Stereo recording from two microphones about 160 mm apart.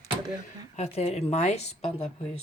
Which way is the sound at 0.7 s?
40° left (ahead or behind).